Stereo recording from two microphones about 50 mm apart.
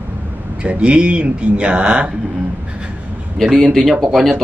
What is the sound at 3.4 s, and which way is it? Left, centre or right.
Speech, centre.